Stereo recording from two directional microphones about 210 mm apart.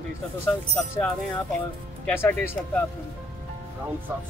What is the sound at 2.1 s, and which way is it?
Speech, 10° left (ahead or behind).